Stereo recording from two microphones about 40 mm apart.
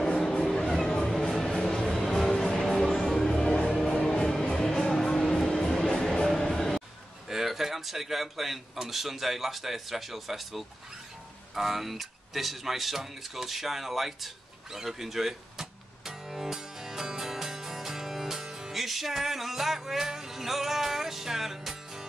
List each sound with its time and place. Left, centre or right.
0.0 s vehicle: centre
0.5 s music: centre
5.9 s music: centre
7.2 s a man's voice: centre
11.5 s a sound: centre
20.1 s music: centre